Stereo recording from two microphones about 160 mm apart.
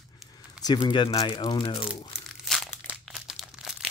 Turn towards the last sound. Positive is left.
turn(degrees=-5)  # may be behind; listen again after turning